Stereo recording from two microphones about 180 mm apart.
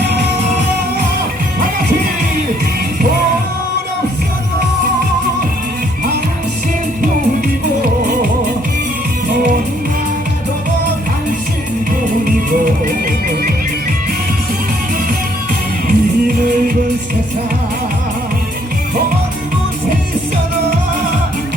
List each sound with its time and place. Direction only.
7.8 s music: 50° right (ahead or behind)
12.2 s music: 50° right (ahead or behind)
15.9 s music: 50° right (ahead or behind)